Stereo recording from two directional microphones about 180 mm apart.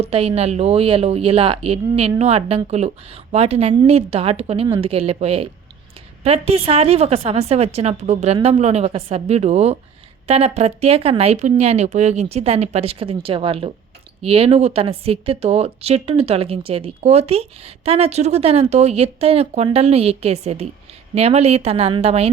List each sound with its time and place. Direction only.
0.0 s a woman's voice: 35° right (ahead or behind)